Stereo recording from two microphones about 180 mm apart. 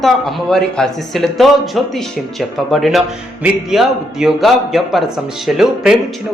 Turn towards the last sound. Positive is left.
turn(degrees=0)  # may be behind; listen again after turning